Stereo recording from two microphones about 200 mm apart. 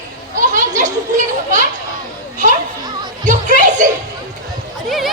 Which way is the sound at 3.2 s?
40° right (ahead or behind).